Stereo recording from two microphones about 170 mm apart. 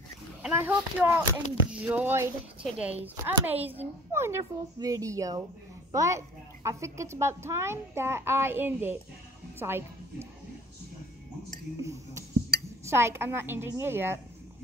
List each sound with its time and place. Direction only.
0.4 s a woman's voice: 10° right (ahead or behind)
11.8 s a woman's voice: 20° right (ahead or behind)